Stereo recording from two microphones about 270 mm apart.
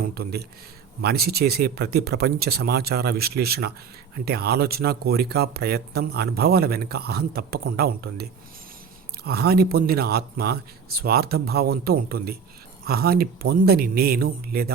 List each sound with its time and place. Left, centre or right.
0.0 s speech: right